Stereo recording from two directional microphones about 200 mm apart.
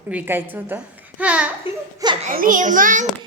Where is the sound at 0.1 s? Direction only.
10° right (ahead or behind).